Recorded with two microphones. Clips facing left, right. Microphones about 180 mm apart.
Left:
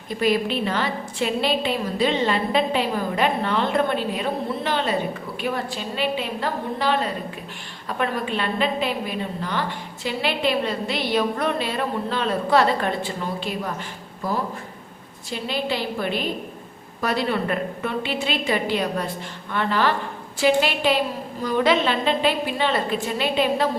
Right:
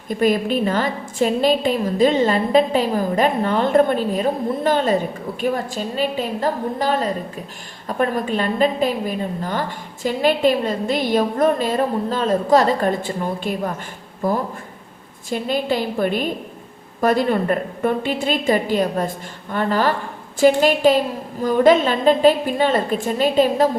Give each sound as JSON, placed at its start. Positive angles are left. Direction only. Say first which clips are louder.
{"t": 0.1, "sound": "a woman's voice", "louder": "right 4 dB", "side_deg": -45}